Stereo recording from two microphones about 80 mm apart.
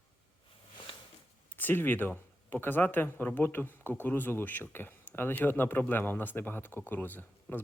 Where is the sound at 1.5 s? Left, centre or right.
Left.